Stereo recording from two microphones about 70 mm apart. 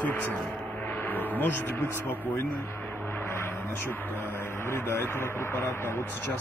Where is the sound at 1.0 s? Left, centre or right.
Left.